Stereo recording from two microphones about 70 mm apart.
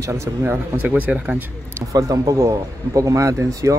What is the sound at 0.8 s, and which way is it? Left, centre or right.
Speech, centre.